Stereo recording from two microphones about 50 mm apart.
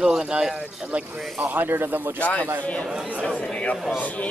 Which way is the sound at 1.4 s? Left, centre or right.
Right.